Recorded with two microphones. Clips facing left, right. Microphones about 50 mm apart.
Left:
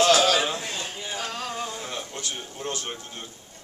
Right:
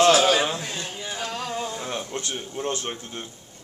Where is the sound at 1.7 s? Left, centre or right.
Right.